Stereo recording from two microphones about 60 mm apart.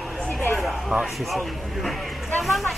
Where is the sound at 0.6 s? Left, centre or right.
Centre.